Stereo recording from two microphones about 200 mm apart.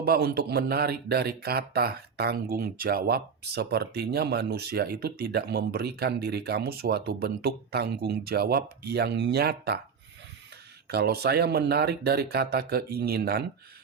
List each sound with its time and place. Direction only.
0.0 s speech: 50° right (ahead or behind)
10.8 s speech: 55° right (ahead or behind)